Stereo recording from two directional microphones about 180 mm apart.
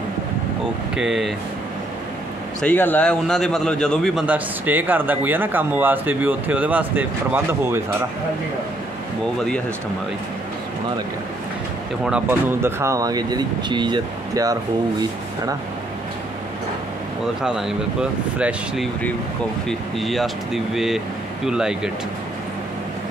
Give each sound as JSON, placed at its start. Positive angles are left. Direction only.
{"t": 0.9, "sound": "speech", "side_deg": -5}
{"t": 2.6, "sound": "speech", "side_deg": 10}
{"t": 4.3, "sound": "speech", "side_deg": -10}
{"t": 12.0, "sound": "speech", "side_deg": -10}
{"t": 17.4, "sound": "speech", "side_deg": 0}
{"t": 19.7, "sound": "speech", "side_deg": 0}